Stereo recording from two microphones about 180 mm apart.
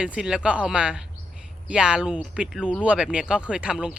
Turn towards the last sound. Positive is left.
turn(degrees=-5)  # may be behind; listen again after turning